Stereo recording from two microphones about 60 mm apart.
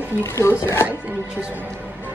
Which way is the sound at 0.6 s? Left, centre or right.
Left.